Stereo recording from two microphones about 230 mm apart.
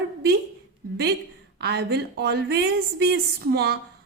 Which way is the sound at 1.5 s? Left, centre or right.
Right.